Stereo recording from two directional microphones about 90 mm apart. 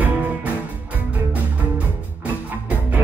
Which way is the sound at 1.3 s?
15° right (ahead or behind).